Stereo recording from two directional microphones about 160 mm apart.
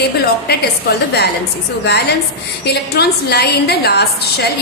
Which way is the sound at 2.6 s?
90° left.